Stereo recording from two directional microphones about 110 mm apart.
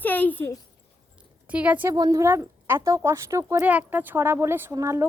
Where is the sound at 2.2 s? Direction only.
20° right (ahead or behind).